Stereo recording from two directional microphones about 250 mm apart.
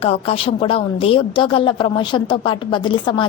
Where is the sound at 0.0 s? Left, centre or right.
Left.